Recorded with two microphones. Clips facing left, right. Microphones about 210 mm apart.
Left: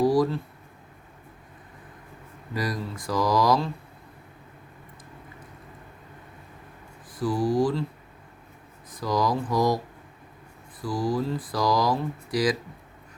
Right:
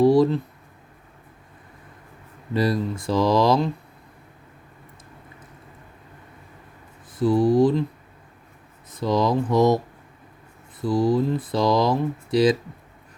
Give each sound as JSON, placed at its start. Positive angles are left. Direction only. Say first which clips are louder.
{"t": 0.0, "sound": "speech", "louder": "right 5 dB", "side_deg": -25}
{"t": 2.5, "sound": "speech", "louder": "right 8 dB", "side_deg": -25}
{"t": 7.2, "sound": "speech", "louder": "right 6 dB", "side_deg": -25}
{"t": 8.9, "sound": "speech", "louder": "right 4 dB", "side_deg": -25}